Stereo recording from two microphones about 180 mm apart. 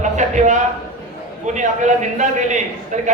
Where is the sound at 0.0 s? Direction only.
40° right (ahead or behind).